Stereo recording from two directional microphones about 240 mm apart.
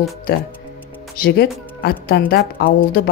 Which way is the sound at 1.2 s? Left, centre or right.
Left.